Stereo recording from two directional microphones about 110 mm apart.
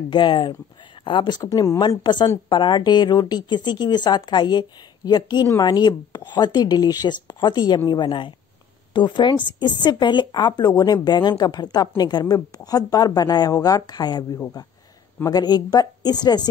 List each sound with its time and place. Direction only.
0.1 s speech: 45° left (ahead or behind)